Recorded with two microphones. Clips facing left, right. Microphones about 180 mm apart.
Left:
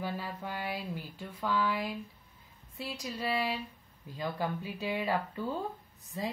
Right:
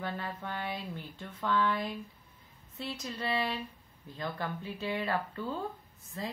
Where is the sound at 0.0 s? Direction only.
10° left (ahead or behind).